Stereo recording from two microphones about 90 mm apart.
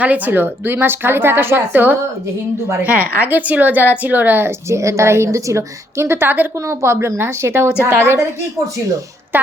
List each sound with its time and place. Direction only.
0.0 s a woman's voice: 20° right (ahead or behind)
9.3 s speech: 20° right (ahead or behind)